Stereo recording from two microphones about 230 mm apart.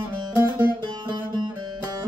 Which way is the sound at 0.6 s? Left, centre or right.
Centre.